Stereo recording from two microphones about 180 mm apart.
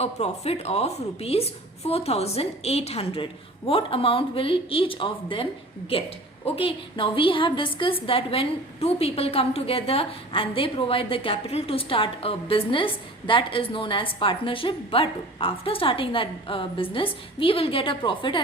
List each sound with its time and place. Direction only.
0.0 s a woman's voice: 35° left (ahead or behind)